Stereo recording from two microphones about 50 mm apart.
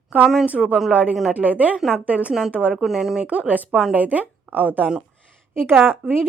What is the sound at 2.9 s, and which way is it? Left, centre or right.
Speech, centre.